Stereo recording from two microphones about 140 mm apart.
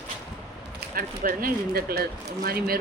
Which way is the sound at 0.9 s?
90° right.